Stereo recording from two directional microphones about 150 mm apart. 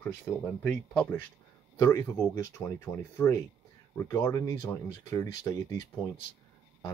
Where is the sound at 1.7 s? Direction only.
20° left (ahead or behind).